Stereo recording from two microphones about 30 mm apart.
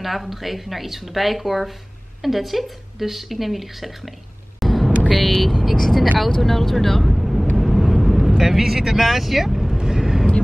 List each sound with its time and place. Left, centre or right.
0.0 s speech: centre
4.6 s vehicle: centre
5.4 s speech: centre
7.1 s vehicle: centre
9.0 s speech: centre
9.8 s vehicle: right